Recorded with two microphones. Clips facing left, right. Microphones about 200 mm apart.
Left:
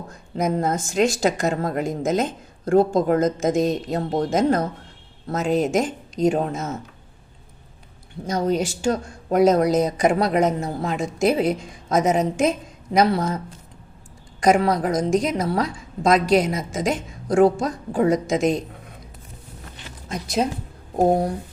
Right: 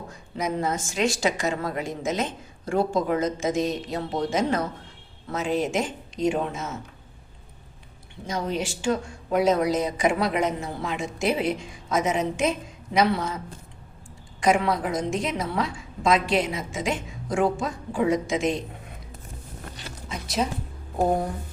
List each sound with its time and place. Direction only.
0.1 s a woman's voice: 50° left (ahead or behind)
8.3 s a woman's voice: 40° left (ahead or behind)
14.4 s a woman's voice: 40° left (ahead or behind)